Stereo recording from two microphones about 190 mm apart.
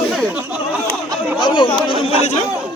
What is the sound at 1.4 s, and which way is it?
Chatter, 25° left (ahead or behind).